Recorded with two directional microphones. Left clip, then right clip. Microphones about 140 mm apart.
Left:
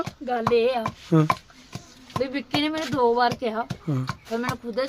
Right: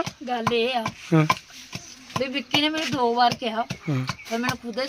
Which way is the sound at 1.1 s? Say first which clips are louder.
Even; 5° left (ahead or behind).